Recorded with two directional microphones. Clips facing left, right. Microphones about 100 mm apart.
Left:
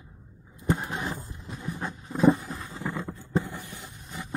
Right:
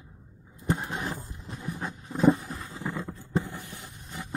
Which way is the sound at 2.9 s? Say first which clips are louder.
Left 1 dB; 20° left (ahead or behind).